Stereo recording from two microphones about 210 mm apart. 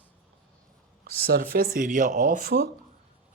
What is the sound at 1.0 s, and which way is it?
Speech, 45° right (ahead or behind).